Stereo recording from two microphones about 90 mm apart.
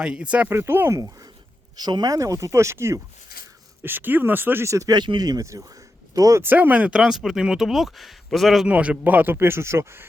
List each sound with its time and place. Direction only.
0.0 s speech: 10° right (ahead or behind)
0.5 s speech: 25° right (ahead or behind)
0.9 s speech: 40° right (ahead or behind)
1.7 s speech: 50° right (ahead or behind); by 4.6 s 20° right (ahead or behind)
4.6 s speech: 35° right (ahead or behind)
4.9 s speech: 55° right (ahead or behind)
6.4 s speech: 20° right (ahead or behind); by 8.6 s centre (ahead or behind)
8.6 s speech: 15° right (ahead or behind); by 10.1 s 30° right (ahead or behind)